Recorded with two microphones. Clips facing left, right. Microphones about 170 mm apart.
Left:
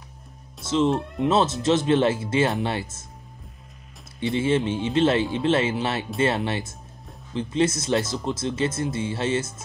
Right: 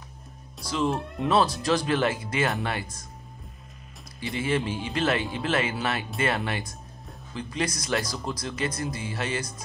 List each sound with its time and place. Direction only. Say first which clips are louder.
0.8 s speech: left 4 dB; centre (ahead or behind)
1.2 s speech: left 2 dB; 25° left (ahead or behind)
4.2 s speech: left 5 dB; 25° left (ahead or behind)